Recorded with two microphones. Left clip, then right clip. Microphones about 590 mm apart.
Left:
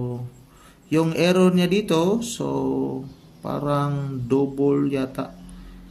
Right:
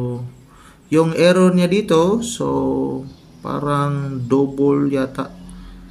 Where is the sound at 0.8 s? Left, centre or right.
Left.